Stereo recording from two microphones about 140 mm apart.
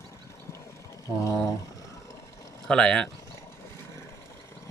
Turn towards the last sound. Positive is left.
turn(degrees=5)  # may be behind; listen again after turning